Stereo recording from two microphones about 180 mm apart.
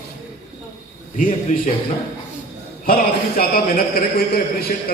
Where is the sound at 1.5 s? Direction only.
45° left (ahead or behind).